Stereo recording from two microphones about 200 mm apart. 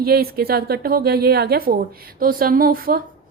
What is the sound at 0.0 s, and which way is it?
A woman's voice, 50° right (ahead or behind).